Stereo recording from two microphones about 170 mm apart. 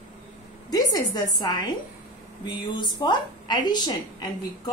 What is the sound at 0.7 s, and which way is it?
A woman's voice, 20° left (ahead or behind).